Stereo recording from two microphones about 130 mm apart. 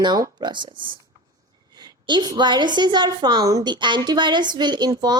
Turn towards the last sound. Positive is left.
turn(degrees=-30)  # may be behind; listen again after turning